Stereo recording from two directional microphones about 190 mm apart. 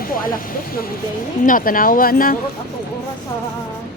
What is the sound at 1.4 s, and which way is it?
Speech, 45° left (ahead or behind).